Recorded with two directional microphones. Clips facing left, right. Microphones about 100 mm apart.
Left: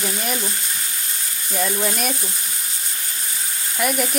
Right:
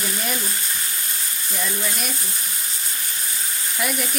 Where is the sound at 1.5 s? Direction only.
50° left (ahead or behind).